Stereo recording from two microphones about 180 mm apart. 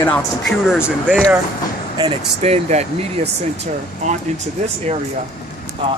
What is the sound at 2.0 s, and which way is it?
Speech, 35° right (ahead or behind).